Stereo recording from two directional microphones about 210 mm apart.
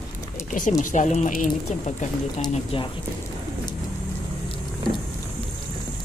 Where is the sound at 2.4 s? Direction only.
25° left (ahead or behind).